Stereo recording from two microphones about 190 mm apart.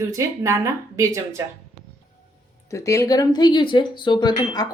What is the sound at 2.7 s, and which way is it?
Speech, 15° left (ahead or behind).